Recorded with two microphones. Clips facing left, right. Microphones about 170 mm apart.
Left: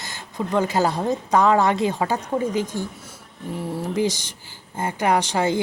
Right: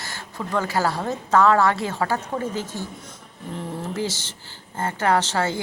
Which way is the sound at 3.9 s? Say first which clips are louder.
Left 5 dB; 15° left (ahead or behind).